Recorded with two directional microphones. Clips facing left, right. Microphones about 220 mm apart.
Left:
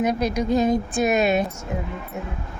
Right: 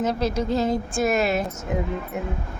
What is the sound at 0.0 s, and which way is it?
A woman's voice, 15° left (ahead or behind).